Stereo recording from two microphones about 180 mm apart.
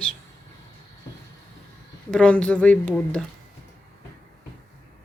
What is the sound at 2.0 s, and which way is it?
Speech, 5° left (ahead or behind).